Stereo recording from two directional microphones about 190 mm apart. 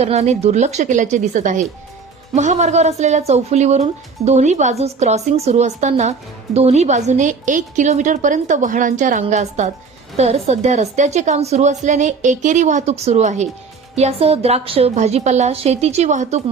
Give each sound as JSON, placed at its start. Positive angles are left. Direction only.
{"t": 0.0, "sound": "a woman's voice", "side_deg": -35}